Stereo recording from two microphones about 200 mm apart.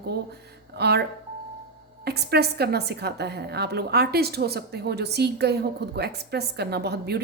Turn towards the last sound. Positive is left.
turn(degrees=-55)  # may be behind; listen again after turning